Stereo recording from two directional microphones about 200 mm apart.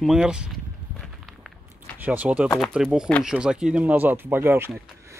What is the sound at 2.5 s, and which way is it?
Speech, 5° left (ahead or behind).